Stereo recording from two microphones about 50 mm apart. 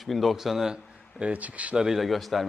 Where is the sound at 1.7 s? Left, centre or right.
Centre.